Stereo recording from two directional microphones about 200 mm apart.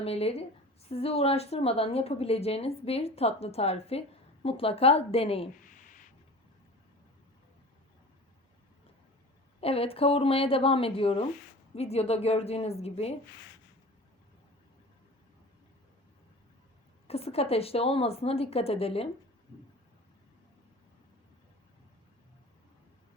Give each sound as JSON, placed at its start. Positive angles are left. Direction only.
{"t": 0.0, "sound": "a woman's voice", "side_deg": 30}
{"t": 5.6, "sound": "a sound", "side_deg": 40}
{"t": 9.6, "sound": "a woman's voice", "side_deg": 30}
{"t": 17.1, "sound": "a woman's voice", "side_deg": 30}